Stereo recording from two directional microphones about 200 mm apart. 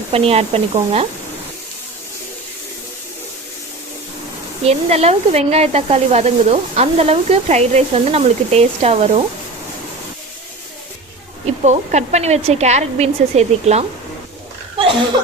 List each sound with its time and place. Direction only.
0.1 s speech: 30° right (ahead or behind)
4.6 s speech: 30° right (ahead or behind)
11.4 s speech: 35° right (ahead or behind)